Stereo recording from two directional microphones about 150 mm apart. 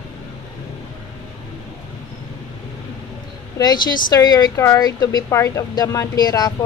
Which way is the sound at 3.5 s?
25° left (ahead or behind).